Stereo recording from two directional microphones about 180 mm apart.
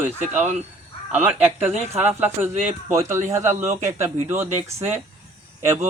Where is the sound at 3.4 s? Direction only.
40° right (ahead or behind).